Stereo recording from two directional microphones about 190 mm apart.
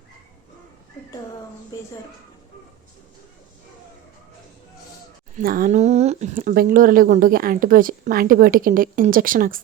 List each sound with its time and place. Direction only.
5.4 s speech: 50° right (ahead or behind)